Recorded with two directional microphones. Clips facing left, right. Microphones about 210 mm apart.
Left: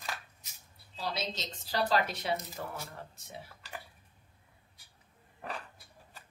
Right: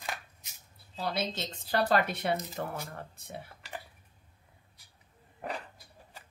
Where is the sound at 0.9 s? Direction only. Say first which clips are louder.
Right 4 dB; 55° right (ahead or behind).